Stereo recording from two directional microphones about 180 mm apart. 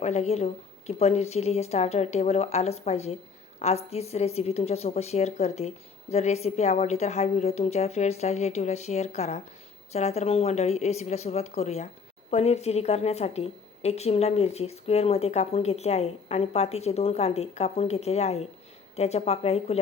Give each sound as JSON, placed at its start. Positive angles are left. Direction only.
{"t": 0.0, "sound": "a woman's voice", "side_deg": 35}